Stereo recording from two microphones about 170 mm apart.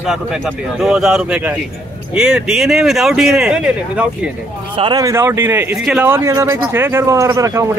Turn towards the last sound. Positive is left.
turn(degrees=-20)  # may be behind; listen again after turning